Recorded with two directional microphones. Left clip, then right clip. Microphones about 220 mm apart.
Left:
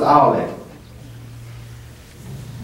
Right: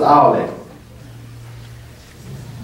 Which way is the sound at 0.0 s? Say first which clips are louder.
Right 2 dB; 5° right (ahead or behind).